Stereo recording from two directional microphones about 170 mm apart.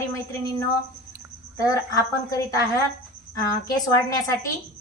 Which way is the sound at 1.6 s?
20° left (ahead or behind).